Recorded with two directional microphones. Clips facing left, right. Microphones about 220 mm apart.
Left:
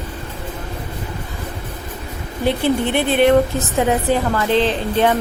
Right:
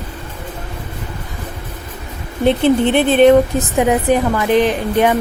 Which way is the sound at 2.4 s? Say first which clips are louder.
Right 5 dB; 20° right (ahead or behind).